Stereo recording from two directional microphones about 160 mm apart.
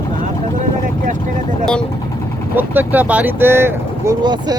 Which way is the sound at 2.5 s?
10° right (ahead or behind).